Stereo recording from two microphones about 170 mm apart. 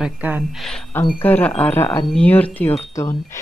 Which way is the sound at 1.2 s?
10° left (ahead or behind).